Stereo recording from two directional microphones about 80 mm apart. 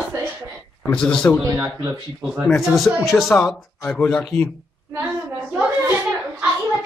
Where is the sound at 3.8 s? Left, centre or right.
Centre.